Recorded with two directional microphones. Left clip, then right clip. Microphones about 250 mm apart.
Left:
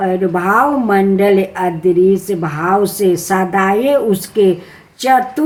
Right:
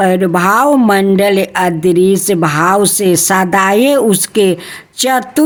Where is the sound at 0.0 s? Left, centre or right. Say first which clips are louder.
Right 4 dB; right.